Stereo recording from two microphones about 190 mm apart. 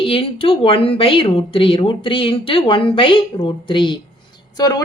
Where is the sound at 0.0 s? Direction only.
30° left (ahead or behind).